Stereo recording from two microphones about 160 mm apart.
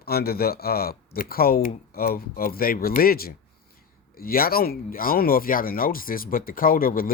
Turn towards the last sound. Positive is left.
turn(degrees=65)  # may be behind; listen again after turning